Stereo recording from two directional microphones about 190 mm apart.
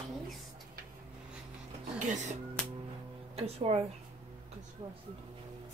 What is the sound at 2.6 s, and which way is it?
Music, 5° left (ahead or behind).